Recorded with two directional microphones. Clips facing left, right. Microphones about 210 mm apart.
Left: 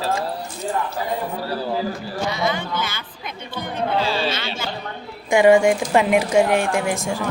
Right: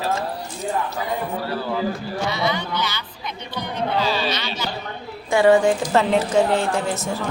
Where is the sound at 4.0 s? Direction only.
30° left (ahead or behind).